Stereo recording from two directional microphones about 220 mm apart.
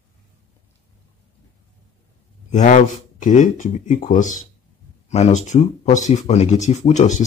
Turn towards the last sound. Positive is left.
turn(degrees=35)  # may be behind; listen again after turning